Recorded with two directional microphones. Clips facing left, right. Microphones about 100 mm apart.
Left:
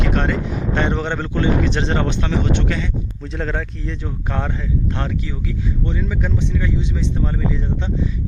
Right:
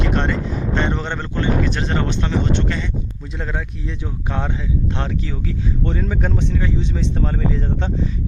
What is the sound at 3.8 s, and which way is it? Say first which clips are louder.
Speech: left 1 dB; 15° right (ahead or behind).